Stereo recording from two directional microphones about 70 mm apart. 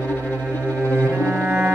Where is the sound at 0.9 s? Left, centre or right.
Right.